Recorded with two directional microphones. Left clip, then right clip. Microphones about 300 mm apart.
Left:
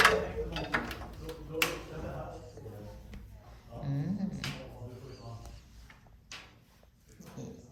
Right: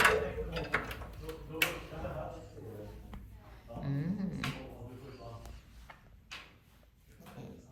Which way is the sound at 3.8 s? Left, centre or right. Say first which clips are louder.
Left 1 dB; centre.